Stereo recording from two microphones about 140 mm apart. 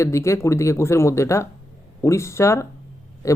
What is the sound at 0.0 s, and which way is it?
Speech, 20° left (ahead or behind).